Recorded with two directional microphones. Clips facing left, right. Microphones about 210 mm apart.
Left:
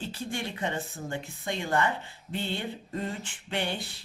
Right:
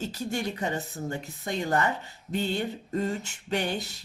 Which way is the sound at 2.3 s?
45° right (ahead or behind).